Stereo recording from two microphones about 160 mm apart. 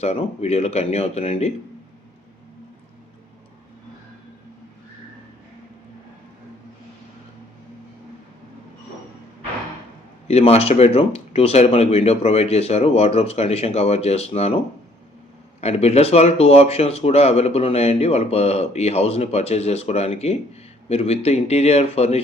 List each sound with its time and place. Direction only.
0.0 s speech: 40° left (ahead or behind)
10.2 s speech: 40° left (ahead or behind)
15.6 s speech: 40° left (ahead or behind)